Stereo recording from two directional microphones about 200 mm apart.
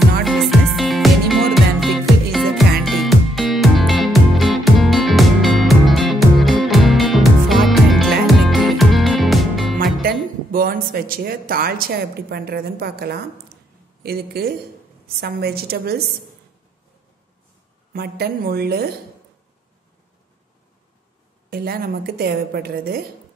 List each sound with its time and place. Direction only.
0.2 s music: centre (ahead or behind)
10.0 s a woman's voice: 45° right (ahead or behind)
17.9 s a woman's voice: 50° right (ahead or behind)
21.5 s a woman's voice: 50° right (ahead or behind)